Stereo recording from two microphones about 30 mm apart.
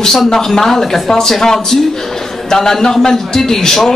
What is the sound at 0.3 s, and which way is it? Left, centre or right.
A man's voice, centre.